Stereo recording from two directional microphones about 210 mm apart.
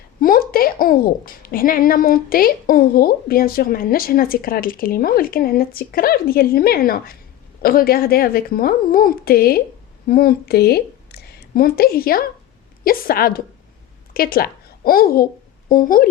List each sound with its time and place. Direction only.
0.2 s a child's voice: 45° left (ahead or behind)